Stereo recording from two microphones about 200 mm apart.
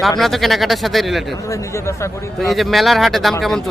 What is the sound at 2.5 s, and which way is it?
Speech, centre (ahead or behind).